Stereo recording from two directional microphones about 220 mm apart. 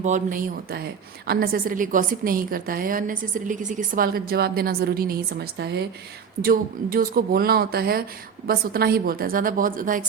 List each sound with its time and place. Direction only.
0.0 s a woman's voice: 35° right (ahead or behind)